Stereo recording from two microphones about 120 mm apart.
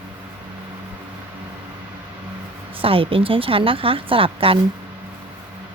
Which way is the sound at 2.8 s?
50° right (ahead or behind).